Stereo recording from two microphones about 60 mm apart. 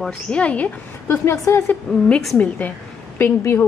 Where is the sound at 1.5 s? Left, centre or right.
Left.